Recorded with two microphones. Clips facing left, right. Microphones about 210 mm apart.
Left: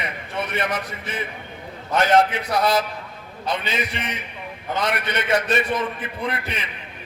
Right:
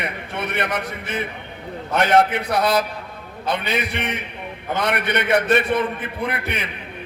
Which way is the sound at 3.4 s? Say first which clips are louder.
Right 2 dB; 60° right (ahead or behind).